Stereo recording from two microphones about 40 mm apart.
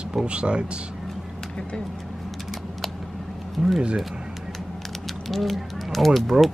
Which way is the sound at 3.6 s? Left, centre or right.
Centre.